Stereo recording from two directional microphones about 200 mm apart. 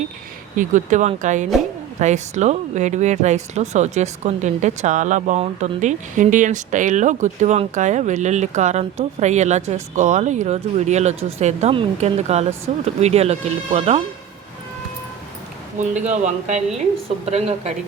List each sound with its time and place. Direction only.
0.5 s speech: 40° right (ahead or behind)
15.8 s speech: 35° right (ahead or behind)